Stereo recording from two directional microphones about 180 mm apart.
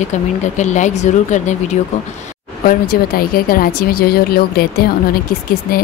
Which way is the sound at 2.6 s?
55° left (ahead or behind).